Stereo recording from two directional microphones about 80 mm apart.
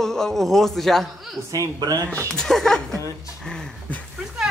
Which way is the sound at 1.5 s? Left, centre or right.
Right.